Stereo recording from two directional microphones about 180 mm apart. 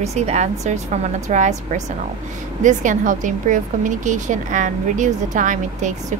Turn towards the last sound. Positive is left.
turn(degrees=-45)  # may be behind; listen again after turning